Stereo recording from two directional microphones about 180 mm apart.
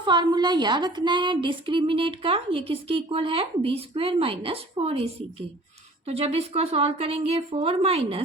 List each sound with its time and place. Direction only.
0.0 s a woman's voice: 25° right (ahead or behind)
6.1 s a woman's voice: 35° right (ahead or behind)